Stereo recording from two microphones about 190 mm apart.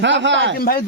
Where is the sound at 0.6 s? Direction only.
50° left (ahead or behind).